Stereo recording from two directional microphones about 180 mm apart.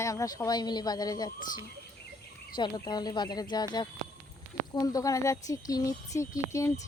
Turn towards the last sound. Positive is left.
turn(degrees=15)  # may be behind; listen again after turning